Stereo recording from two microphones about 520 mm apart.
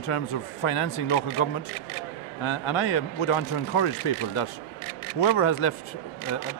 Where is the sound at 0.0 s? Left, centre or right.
Left.